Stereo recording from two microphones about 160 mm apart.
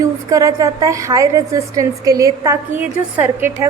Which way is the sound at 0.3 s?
20° right (ahead or behind).